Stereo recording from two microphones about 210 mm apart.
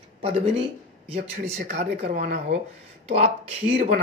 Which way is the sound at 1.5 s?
45° right (ahead or behind).